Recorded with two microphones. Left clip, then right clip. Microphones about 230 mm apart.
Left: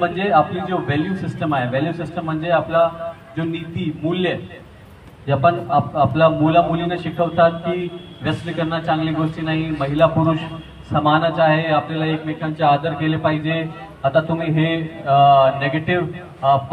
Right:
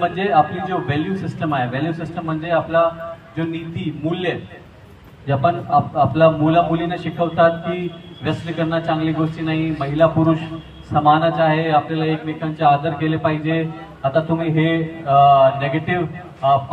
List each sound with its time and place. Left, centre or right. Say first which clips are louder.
0.0 s a man's voice: even; left
5.2 s a man's voice: left 2 dB; left